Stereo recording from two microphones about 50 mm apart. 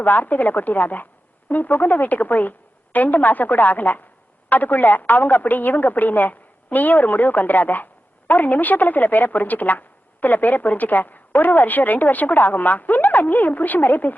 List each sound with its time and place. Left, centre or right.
0.0 s a woman's voice: left